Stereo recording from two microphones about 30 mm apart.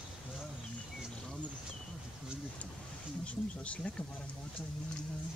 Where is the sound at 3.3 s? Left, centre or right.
Left.